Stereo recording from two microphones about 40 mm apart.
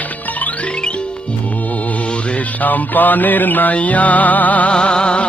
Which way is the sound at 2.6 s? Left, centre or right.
Left.